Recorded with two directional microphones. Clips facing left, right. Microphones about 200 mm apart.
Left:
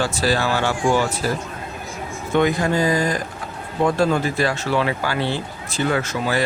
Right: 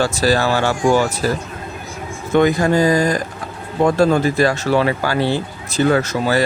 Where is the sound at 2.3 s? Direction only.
40° right (ahead or behind).